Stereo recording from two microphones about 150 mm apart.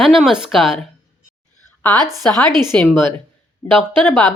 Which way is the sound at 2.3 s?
30° right (ahead or behind).